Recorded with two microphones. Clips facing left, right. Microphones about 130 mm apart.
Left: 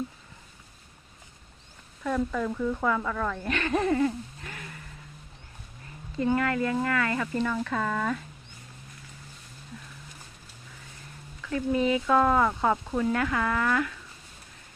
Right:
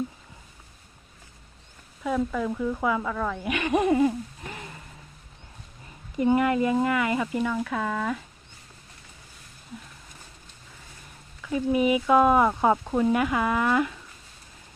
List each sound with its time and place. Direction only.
2.0 s speech: 5° right (ahead or behind); by 4.8 s 25° right (ahead or behind)
6.1 s speech: 20° right (ahead or behind)
11.4 s speech: 15° right (ahead or behind)